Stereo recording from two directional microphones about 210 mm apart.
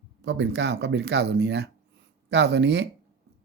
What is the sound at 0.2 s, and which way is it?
Speech, 55° right (ahead or behind).